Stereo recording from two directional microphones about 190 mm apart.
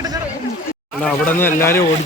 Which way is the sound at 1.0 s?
5° left (ahead or behind).